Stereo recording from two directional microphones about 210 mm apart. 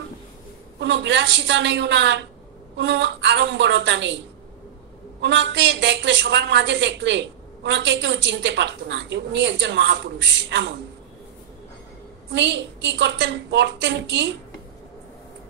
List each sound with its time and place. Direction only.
0.7 s a woman's voice: 55° right (ahead or behind)
5.2 s a woman's voice: 60° right (ahead or behind)
12.3 s a woman's voice: 60° right (ahead or behind)